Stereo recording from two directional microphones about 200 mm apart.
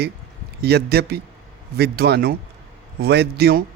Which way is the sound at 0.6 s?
55° right (ahead or behind).